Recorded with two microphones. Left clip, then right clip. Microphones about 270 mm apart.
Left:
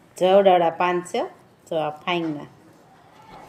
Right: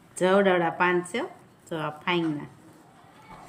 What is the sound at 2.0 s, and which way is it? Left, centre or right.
Speech, centre.